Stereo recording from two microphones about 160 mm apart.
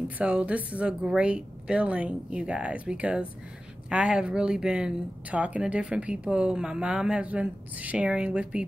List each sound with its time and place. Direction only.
0.2 s speech: 10° right (ahead or behind)